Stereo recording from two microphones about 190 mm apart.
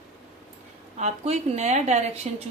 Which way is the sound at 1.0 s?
35° right (ahead or behind).